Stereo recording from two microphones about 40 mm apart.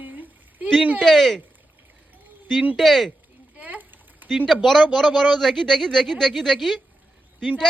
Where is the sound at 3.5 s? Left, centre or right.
Right.